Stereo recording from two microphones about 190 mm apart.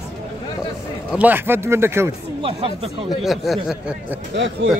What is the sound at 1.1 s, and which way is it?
A man's voice, 10° right (ahead or behind).